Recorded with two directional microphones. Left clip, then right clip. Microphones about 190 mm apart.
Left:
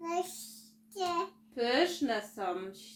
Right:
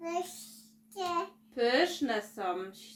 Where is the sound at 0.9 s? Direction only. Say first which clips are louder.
Even; 20° right (ahead or behind).